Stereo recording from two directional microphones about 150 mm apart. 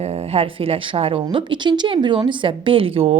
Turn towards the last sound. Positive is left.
turn(degrees=-40)  # may be behind; listen again after turning